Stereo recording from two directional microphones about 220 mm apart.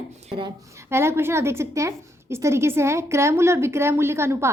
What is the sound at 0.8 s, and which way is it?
A woman's voice, 10° right (ahead or behind).